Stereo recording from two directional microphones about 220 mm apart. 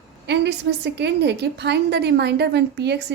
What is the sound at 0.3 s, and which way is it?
A woman's voice, 50° right (ahead or behind).